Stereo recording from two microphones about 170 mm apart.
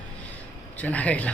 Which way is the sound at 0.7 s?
10° left (ahead or behind).